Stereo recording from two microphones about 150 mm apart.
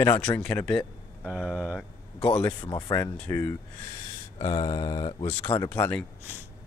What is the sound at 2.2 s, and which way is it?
Speech, 10° left (ahead or behind).